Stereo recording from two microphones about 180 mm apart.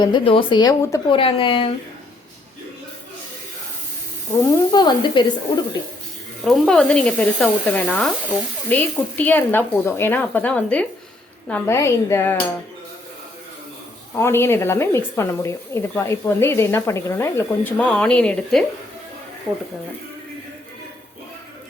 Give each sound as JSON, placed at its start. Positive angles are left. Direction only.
{"t": 0.0, "sound": "speech", "side_deg": 25}
{"t": 1.1, "sound": "speech", "side_deg": 30}
{"t": 4.4, "sound": "speech", "side_deg": 25}
{"t": 6.4, "sound": "speech", "side_deg": 0}
{"t": 14.2, "sound": "speech", "side_deg": 15}